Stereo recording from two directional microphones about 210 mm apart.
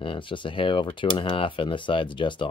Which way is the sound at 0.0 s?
25° left (ahead or behind).